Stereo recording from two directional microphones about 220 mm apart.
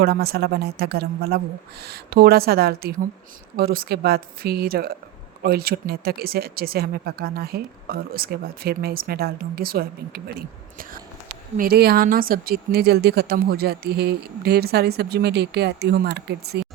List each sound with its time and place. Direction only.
0.0 s speech: 45° right (ahead or behind)